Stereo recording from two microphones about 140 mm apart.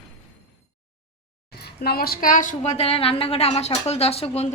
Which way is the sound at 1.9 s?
90° left.